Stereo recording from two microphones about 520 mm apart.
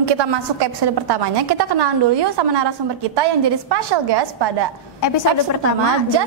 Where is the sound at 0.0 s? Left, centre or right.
Right.